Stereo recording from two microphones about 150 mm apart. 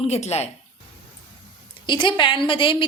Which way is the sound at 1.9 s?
30° left (ahead or behind).